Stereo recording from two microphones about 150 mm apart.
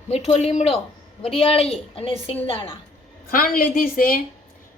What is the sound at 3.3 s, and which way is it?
Speech, 70° left (ahead or behind).